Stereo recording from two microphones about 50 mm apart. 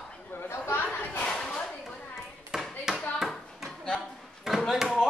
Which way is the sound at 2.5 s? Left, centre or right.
Centre.